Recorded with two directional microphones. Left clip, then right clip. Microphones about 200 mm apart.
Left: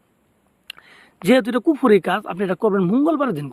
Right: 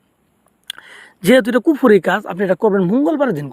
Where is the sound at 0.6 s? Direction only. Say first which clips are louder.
Right 7 dB; 20° right (ahead or behind).